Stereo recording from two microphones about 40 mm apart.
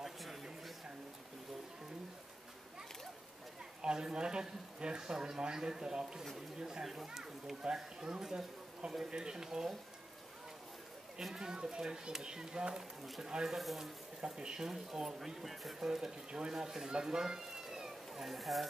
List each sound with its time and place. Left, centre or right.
0.0 s a sound: centre
3.8 s speech: right
6.9 s speech: centre
11.3 s speech: centre
13.6 s speech: centre
14.2 s speech: centre